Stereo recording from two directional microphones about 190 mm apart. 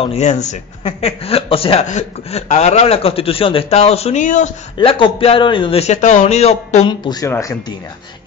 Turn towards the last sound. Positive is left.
turn(degrees=15)  # may be behind; listen again after turning